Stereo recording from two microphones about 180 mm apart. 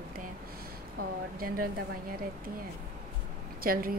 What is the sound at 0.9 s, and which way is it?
Speech, 55° right (ahead or behind).